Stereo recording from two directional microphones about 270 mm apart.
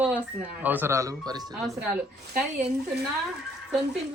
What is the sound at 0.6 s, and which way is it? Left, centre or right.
Speech, centre.